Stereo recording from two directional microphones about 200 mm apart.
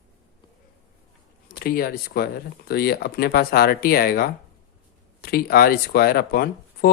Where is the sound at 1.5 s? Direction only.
45° left (ahead or behind).